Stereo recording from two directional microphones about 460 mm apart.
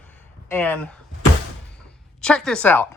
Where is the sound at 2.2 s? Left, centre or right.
Centre.